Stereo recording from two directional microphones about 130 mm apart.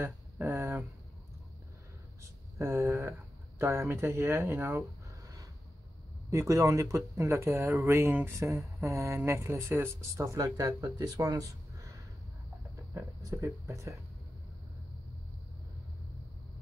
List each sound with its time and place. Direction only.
0.0 s a sound: 20° right (ahead or behind)
2.6 s speech: 25° right (ahead or behind)
5.2 s a sound: 25° right (ahead or behind)
6.3 s speech: 25° right (ahead or behind)
8.5 s mantra: centre (ahead or behind)
8.8 s speech: 25° right (ahead or behind)
12.9 s speech: 25° right (ahead or behind)